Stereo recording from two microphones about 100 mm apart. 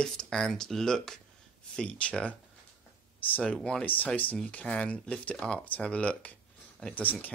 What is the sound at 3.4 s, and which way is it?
Speech, 10° left (ahead or behind).